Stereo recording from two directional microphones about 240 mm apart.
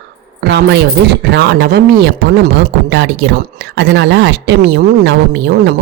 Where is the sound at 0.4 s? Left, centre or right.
Right.